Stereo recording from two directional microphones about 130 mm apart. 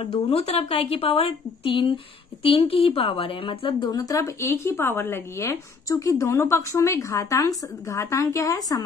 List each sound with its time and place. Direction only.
0.3 s a woman's voice: 50° left (ahead or behind); by 8.8 s 30° left (ahead or behind)